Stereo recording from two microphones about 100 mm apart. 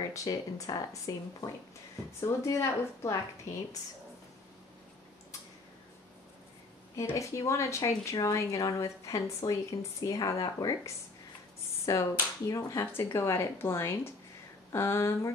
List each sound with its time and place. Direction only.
0.1 s speech: 35° left (ahead or behind)
2.1 s speech: 30° left (ahead or behind)
7.2 s speech: 30° left (ahead or behind)
11.8 s speech: 35° left (ahead or behind)